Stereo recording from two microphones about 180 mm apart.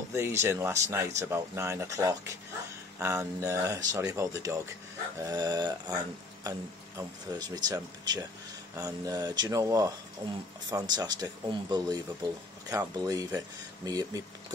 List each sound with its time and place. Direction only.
0.1 s speech: 15° right (ahead or behind)
7.0 s speech: 20° right (ahead or behind)